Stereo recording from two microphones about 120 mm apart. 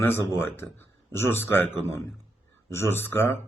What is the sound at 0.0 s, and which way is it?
Speech, 20° left (ahead or behind).